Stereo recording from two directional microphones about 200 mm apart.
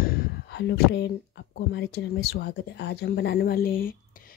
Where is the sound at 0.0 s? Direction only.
60° left (ahead or behind).